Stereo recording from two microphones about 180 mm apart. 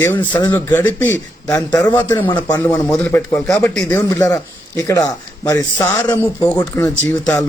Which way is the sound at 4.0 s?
20° left (ahead or behind).